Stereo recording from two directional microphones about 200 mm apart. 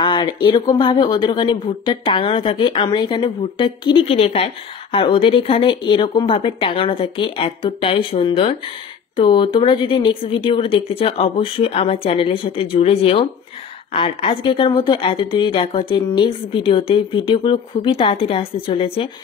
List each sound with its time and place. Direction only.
0.0 s a woman's voice: 20° left (ahead or behind)